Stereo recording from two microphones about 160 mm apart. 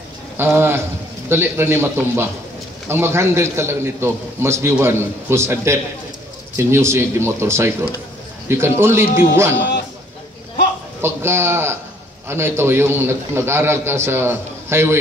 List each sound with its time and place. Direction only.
0.4 s a man's voice: 15° right (ahead or behind)
11.0 s a man's voice: 15° right (ahead or behind)